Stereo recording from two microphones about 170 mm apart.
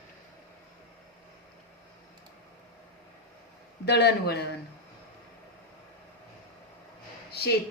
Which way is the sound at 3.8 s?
70° left (ahead or behind).